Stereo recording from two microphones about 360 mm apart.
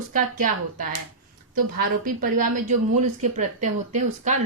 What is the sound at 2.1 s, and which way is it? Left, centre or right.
Speech, right.